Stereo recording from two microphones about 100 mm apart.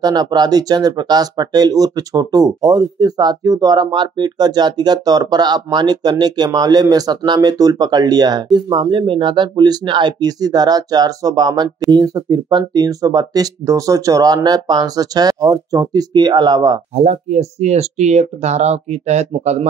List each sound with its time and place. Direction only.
0.0 s speech: 45° right (ahead or behind)
16.9 s speech: 90° right